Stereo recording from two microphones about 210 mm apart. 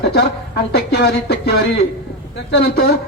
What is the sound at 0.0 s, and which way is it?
A man's voice, 50° left (ahead or behind).